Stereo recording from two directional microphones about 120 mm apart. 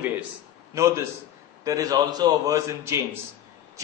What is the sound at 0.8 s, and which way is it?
A man's voice, 25° right (ahead or behind).